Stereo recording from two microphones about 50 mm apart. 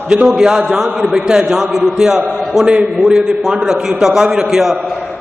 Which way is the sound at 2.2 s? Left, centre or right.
Right.